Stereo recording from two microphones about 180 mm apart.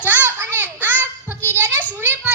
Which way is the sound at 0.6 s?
10° right (ahead or behind).